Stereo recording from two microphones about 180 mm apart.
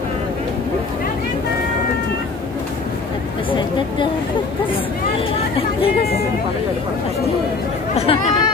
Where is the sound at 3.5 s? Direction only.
25° left (ahead or behind).